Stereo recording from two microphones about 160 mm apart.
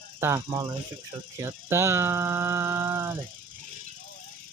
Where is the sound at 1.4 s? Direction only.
15° right (ahead or behind).